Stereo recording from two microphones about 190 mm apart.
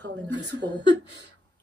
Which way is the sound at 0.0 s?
65° right (ahead or behind).